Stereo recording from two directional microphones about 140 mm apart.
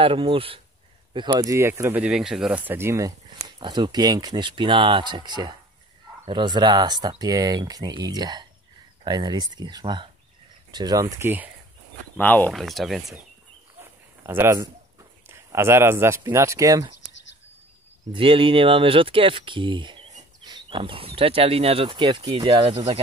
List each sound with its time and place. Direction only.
0.0 s speech: 40° right (ahead or behind); by 3.1 s 20° right (ahead or behind)
3.4 s speech: 30° right (ahead or behind); by 11.5 s 15° right (ahead or behind)
12.2 s speech: 10° left (ahead or behind)
12.5 s speech: centre (ahead or behind)
13.7 s a sound: 15° right (ahead or behind)
14.6 s speech: 20° right (ahead or behind)
18.1 s speech: 40° right (ahead or behind)